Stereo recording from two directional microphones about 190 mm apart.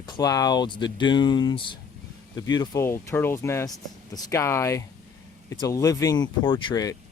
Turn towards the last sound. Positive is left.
turn(degrees=20)  # may be behind; listen again after turning